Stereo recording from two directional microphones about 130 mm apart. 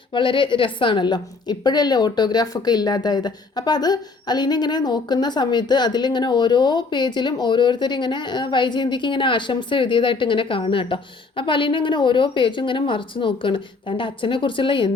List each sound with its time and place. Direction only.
0.1 s a woman's voice: 40° left (ahead or behind)